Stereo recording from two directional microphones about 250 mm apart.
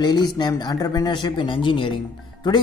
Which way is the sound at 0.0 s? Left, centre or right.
Centre.